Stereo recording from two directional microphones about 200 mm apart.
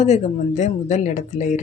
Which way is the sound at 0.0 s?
35° left (ahead or behind).